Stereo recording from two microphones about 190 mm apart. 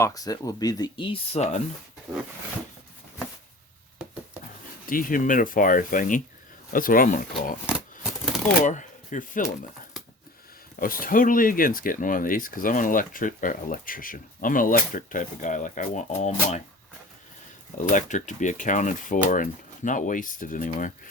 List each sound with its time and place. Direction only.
0.0 s speech: 20° left (ahead or behind); by 1.6 s 35° left (ahead or behind)
4.9 s speech: 45° left (ahead or behind)
8.6 s speech: 40° left (ahead or behind)
10.8 s speech: 50° left (ahead or behind)
17.7 s speech: 40° left (ahead or behind)